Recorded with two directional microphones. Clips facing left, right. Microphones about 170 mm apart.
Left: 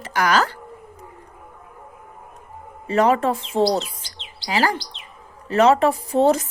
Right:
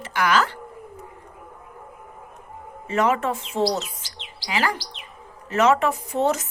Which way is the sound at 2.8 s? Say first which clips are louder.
Left 4 dB; 35° left (ahead or behind).